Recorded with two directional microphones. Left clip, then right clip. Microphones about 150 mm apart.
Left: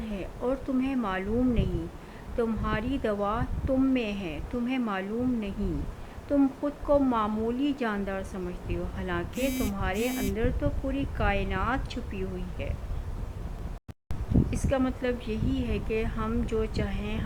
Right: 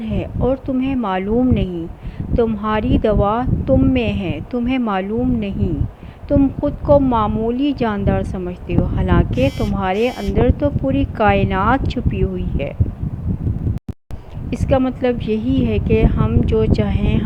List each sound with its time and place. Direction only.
0.0 s speech: 40° right (ahead or behind)
6.8 s a woman's voice: 40° right (ahead or behind)
14.5 s speech: 35° right (ahead or behind)